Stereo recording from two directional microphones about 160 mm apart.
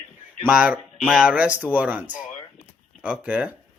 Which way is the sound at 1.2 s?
10° right (ahead or behind).